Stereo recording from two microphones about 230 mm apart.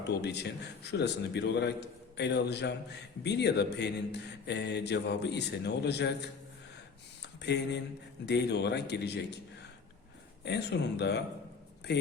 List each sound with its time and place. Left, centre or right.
0.1 s a man's voice: left
7.5 s a man's voice: left
10.4 s a man's voice: left